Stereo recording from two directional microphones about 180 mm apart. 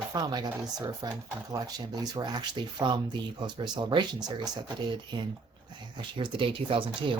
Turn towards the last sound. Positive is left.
turn(degrees=-30)  # may be behind; listen again after turning